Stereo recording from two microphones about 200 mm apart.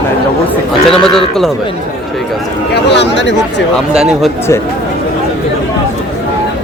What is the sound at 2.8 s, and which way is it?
Speech, 60° left (ahead or behind).